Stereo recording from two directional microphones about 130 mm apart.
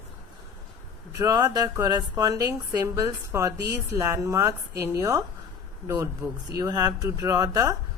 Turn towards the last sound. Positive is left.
turn(degrees=-30)  # may be behind; listen again after turning